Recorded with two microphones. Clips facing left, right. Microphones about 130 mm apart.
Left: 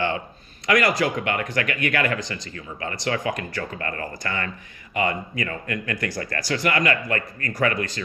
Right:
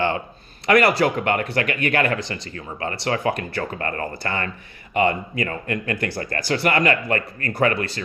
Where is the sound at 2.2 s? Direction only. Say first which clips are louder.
Right 2 dB; 55° right (ahead or behind).